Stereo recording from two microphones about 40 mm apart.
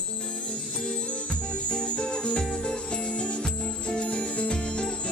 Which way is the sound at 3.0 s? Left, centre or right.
Left.